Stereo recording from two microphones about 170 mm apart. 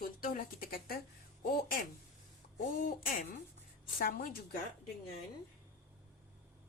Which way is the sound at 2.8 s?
55° left (ahead or behind).